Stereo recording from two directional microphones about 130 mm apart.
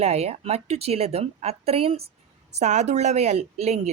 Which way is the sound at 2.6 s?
60° right (ahead or behind).